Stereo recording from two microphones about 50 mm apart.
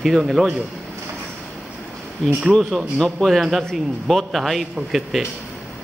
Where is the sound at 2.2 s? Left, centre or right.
Centre.